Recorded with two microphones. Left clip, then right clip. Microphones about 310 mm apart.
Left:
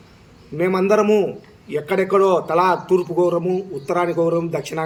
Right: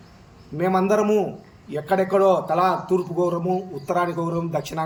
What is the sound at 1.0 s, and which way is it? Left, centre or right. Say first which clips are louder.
Speech: left 4 dB; left.